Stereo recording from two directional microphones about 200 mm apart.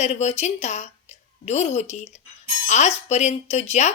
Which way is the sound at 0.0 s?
35° left (ahead or behind).